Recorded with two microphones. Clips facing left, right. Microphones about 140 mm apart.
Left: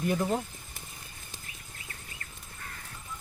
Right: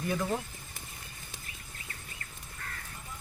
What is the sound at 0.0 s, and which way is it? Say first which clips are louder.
Speech: left 3 dB; 15° left (ahead or behind).